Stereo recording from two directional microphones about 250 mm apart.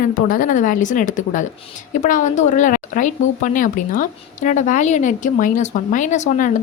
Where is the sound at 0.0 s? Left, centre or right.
Left.